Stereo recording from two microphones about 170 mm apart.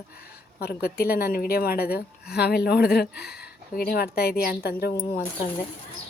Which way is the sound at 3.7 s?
60° left (ahead or behind).